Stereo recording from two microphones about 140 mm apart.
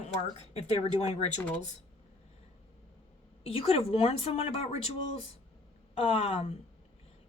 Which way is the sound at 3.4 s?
45° left (ahead or behind).